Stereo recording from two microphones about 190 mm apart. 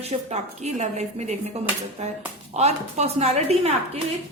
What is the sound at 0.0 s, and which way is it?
Speech, 35° right (ahead or behind).